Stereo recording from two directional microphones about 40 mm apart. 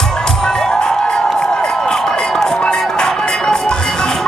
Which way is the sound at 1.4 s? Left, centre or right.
Centre.